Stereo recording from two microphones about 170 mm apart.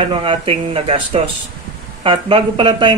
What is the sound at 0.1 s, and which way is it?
Speech, 30° right (ahead or behind).